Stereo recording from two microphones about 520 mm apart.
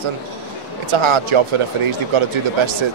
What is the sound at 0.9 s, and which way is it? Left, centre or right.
Speech, right.